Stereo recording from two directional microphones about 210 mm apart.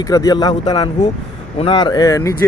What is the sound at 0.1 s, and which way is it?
A man's voice, 15° left (ahead or behind).